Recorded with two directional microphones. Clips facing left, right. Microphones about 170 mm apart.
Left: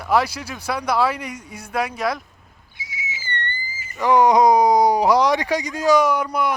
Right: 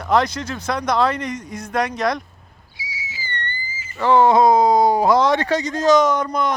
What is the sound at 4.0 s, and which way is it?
Speech, 15° left (ahead or behind).